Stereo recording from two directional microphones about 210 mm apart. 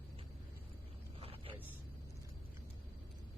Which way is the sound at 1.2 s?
25° right (ahead or behind).